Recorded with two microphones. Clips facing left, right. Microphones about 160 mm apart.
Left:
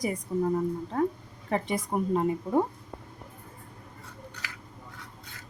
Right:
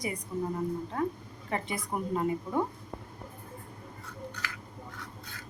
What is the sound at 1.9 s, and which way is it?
Speech, 35° left (ahead or behind).